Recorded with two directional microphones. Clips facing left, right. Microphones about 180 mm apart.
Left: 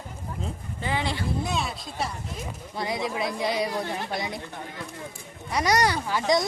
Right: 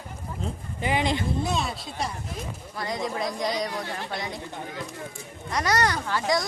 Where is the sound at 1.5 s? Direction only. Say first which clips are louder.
Right 1 dB; centre (ahead or behind).